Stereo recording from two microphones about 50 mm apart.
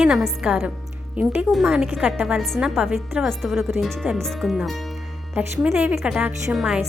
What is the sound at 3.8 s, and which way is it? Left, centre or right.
Speech, centre.